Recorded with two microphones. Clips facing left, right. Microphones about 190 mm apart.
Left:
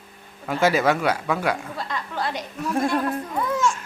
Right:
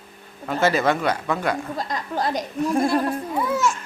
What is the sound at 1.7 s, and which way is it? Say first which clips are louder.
Speech: right 3 dB; 40° right (ahead or behind).